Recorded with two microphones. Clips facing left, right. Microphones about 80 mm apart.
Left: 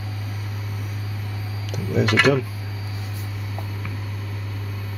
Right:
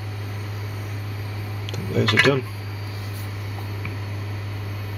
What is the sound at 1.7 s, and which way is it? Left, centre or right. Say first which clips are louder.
Speech: left 1 dB; centre.